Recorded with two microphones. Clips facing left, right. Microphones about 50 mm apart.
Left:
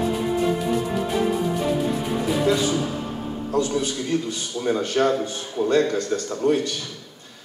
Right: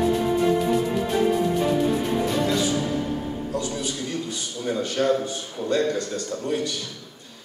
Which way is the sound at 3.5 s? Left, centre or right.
Left.